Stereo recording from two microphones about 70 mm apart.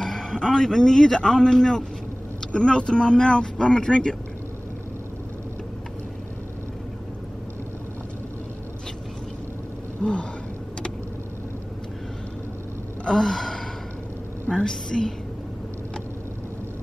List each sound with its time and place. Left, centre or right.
0.0 s speech: centre
10.0 s speech: centre
13.0 s sigh: centre
14.5 s speech: centre